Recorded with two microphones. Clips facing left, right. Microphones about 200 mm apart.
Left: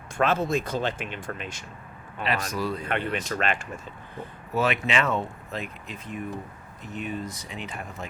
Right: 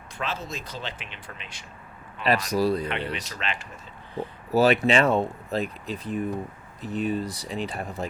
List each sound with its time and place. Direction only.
0.2 s speech: 55° left (ahead or behind)
2.2 s speech: 40° right (ahead or behind)
3.1 s speech: 50° left (ahead or behind)
4.5 s speech: 35° right (ahead or behind)